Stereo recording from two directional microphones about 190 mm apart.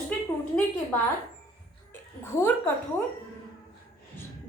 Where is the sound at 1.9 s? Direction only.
10° left (ahead or behind).